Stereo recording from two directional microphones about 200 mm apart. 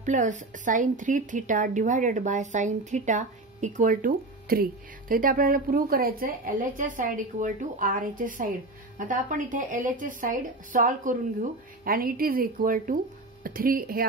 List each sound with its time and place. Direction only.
0.0 s speech: 40° right (ahead or behind)